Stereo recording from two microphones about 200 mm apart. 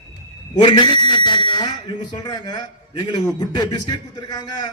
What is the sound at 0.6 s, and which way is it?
A man's voice, 25° left (ahead or behind).